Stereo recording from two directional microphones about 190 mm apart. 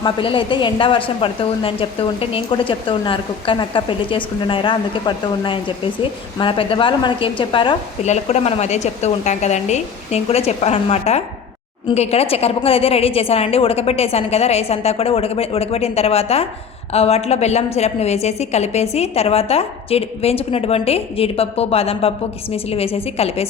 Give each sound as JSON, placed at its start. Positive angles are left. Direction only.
{"t": 0.0, "sound": "a woman's voice", "side_deg": 25}